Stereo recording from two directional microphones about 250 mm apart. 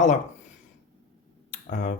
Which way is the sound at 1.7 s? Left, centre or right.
Left.